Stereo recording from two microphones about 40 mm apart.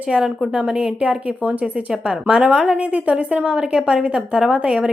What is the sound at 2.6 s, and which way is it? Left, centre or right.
Speech, right.